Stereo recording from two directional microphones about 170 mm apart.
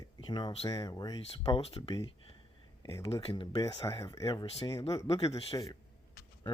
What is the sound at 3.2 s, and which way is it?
Speech, 30° left (ahead or behind).